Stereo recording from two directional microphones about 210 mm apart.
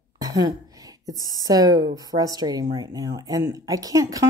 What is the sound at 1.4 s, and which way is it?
Speech, 15° right (ahead or behind).